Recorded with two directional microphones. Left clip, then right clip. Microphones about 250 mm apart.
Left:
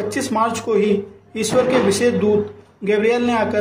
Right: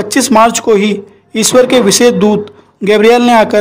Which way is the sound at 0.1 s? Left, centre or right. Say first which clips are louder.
Right 14 dB; right.